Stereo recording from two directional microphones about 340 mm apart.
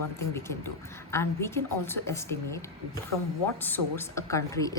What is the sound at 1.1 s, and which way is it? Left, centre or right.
A woman's voice, centre.